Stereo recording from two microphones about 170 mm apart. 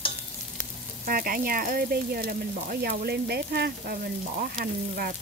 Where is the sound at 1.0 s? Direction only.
55° right (ahead or behind).